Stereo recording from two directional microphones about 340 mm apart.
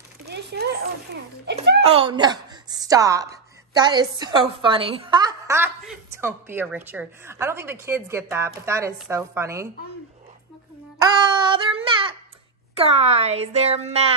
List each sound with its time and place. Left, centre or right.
0.3 s speech: right
1.9 s a woman's voice: centre
11.0 s music: centre
12.7 s a woman's voice: centre